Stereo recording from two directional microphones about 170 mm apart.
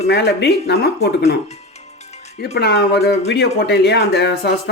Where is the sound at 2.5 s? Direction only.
80° left.